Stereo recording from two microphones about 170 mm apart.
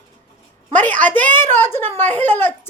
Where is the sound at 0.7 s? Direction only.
10° left (ahead or behind).